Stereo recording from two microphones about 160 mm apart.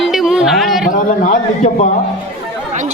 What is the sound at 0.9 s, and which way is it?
Speech, 50° left (ahead or behind).